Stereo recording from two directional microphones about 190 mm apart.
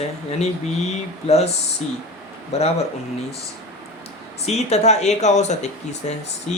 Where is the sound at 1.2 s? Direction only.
35° left (ahead or behind).